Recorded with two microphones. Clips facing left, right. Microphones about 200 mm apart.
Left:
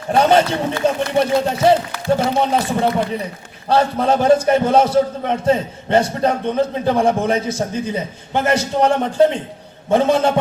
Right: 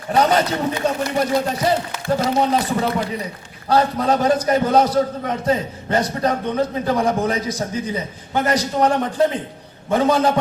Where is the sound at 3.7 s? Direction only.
30° left (ahead or behind).